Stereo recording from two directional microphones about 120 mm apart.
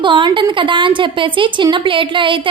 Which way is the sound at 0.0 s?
40° right (ahead or behind).